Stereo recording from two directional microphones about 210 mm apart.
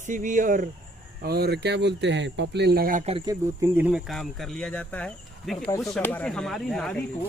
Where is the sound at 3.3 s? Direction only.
10° right (ahead or behind).